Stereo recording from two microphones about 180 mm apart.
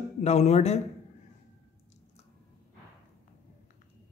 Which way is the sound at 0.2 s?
35° left (ahead or behind).